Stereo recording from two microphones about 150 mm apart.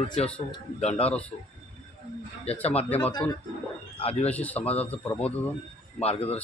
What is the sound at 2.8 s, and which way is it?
Speech, 10° left (ahead or behind).